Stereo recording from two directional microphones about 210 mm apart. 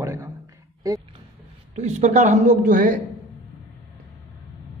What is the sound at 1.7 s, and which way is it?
A man's voice, 30° right (ahead or behind).